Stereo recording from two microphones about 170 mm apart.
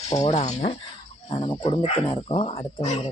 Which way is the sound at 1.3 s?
25° left (ahead or behind).